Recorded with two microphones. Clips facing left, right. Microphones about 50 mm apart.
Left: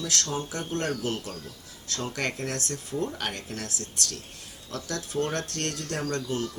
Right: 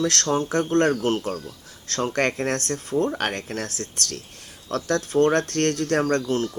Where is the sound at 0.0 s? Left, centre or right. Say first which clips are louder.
Right 8 dB; right.